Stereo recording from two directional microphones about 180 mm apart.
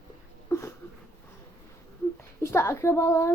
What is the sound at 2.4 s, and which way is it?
Speech, 15° left (ahead or behind).